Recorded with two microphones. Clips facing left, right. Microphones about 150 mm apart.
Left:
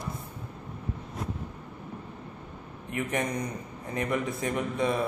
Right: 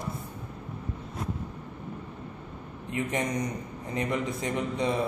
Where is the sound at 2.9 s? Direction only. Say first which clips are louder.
Right 1 dB; 20° right (ahead or behind).